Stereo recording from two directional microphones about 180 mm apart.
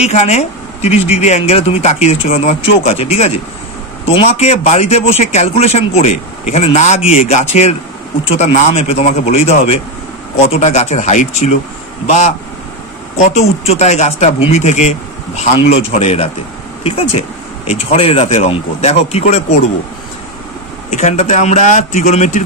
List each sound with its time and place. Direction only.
0.0 s a man's voice: 40° left (ahead or behind)
20.9 s a man's voice: 40° left (ahead or behind)